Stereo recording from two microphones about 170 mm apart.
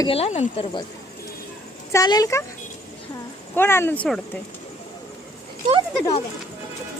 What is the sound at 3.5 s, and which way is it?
Speech, 15° left (ahead or behind).